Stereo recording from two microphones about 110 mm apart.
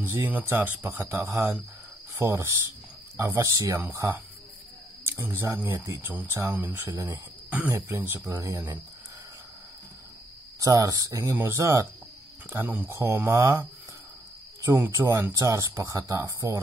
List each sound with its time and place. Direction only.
0.0 s speech: 25° right (ahead or behind)
0.3 s speech: 15° right (ahead or behind)
10.6 s speech: 35° right (ahead or behind)